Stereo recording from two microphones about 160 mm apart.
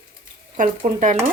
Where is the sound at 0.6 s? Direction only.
55° right (ahead or behind).